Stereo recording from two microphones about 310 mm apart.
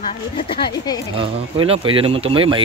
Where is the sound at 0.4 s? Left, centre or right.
Centre.